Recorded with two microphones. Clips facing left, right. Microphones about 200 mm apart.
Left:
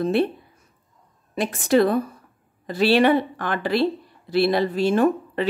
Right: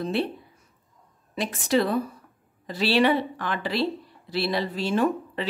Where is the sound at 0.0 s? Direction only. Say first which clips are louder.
Left 6 dB; 50° left (ahead or behind).